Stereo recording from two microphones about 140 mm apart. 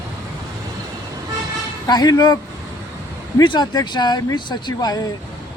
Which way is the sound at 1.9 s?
30° left (ahead or behind).